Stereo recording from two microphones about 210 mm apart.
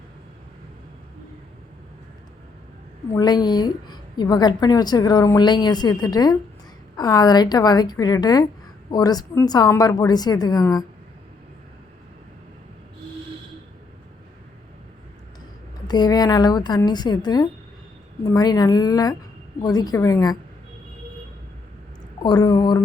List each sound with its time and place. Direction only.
3.1 s a woman's voice: 20° left (ahead or behind)
15.9 s a woman's voice: 20° left (ahead or behind)
22.2 s a woman's voice: 20° left (ahead or behind)